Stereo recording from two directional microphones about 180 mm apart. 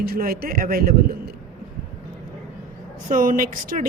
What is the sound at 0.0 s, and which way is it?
Speech, 55° right (ahead or behind).